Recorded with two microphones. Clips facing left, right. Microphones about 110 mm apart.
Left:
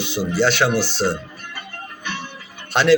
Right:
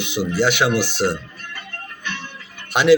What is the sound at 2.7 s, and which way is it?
Speech, 10° right (ahead or behind).